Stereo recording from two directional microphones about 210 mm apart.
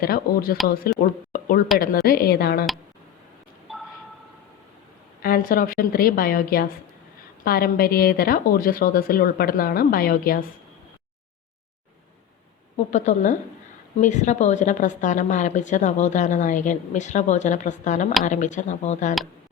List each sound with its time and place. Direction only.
0.0 s speech: 45° left (ahead or behind)
1.3 s a sound: 45° left (ahead or behind)
1.8 s speech: 45° left (ahead or behind)
3.7 s a sound: centre (ahead or behind)
5.2 s speech: 45° left (ahead or behind)
12.7 s a woman's voice: 35° left (ahead or behind)